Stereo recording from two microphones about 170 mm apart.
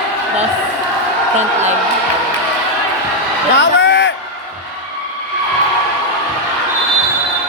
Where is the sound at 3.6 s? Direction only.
90° left.